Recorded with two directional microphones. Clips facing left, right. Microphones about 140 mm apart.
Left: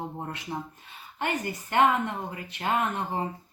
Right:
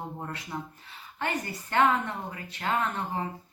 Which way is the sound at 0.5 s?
20° left (ahead or behind).